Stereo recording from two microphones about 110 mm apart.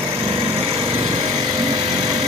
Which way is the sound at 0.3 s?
65° right (ahead or behind).